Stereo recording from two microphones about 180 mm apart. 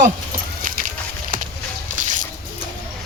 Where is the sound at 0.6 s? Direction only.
50° right (ahead or behind).